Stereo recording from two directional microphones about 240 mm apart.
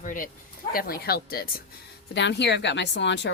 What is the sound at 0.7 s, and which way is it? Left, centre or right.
A woman's voice, left.